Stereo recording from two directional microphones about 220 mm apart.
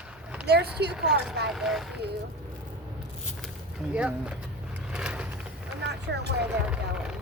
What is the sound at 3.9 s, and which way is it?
Vehicle, 5° right (ahead or behind).